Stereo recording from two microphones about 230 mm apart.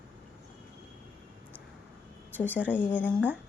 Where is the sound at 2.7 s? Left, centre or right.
Centre.